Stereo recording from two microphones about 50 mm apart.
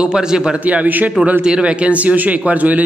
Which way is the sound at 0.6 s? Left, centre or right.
Right.